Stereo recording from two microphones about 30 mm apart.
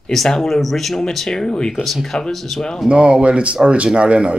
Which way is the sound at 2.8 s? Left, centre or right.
Right.